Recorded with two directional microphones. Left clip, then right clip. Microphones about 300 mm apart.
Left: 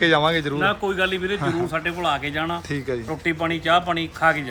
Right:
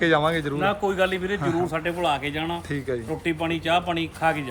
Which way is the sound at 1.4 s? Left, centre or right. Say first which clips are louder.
Left 1 dB; centre.